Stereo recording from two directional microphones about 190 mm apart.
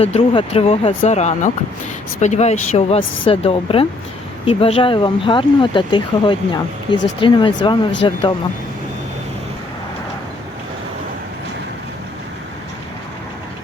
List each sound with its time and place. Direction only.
0.0 s speech: 30° left (ahead or behind)